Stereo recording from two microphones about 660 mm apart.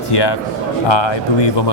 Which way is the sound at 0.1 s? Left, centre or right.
Left.